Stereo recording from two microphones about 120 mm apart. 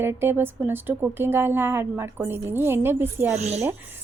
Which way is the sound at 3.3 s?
65° right (ahead or behind).